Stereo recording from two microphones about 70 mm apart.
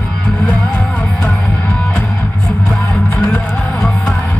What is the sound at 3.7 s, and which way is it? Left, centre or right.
Music, centre.